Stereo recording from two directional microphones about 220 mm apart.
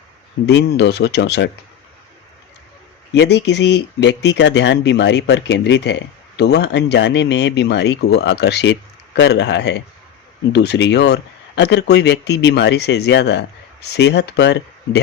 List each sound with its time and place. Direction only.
0.4 s speech: 50° left (ahead or behind)
3.2 s speech: 50° left (ahead or behind)